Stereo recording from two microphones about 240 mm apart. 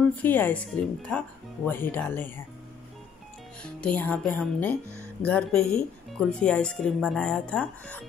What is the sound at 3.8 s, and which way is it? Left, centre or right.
Speech, centre.